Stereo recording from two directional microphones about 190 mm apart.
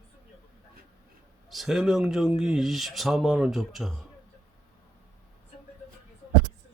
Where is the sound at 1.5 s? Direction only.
Centre (ahead or behind).